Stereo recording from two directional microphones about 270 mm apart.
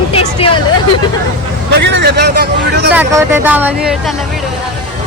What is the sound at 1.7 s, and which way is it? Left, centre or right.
Speech, right.